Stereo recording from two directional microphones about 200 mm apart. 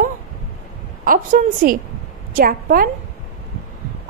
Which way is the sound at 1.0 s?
45° right (ahead or behind).